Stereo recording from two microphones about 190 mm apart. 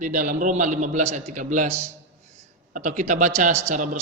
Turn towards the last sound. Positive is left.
turn(degrees=-40)  # may be behind; listen again after turning